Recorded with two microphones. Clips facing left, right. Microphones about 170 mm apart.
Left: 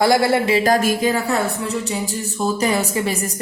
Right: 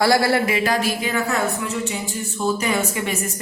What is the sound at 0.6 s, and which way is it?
A woman's voice, 45° left (ahead or behind).